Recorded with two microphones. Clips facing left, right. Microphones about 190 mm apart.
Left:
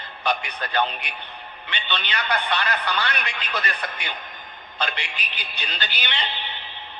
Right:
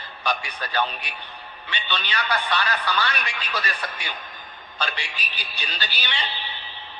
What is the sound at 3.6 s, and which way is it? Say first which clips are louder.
Speech: left 1 dB; 20° left (ahead or behind).